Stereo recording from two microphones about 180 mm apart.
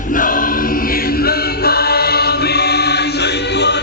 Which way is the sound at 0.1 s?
50° left (ahead or behind).